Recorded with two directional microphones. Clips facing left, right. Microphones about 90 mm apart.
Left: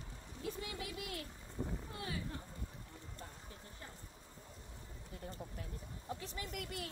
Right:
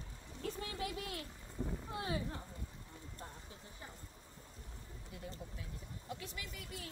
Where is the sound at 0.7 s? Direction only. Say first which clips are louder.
Right 3 dB; 30° right (ahead or behind).